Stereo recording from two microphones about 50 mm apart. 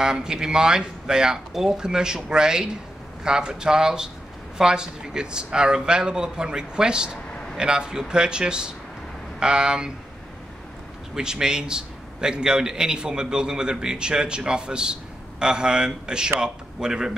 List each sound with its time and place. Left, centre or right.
0.0 s a man's voice: centre
11.1 s a man's voice: centre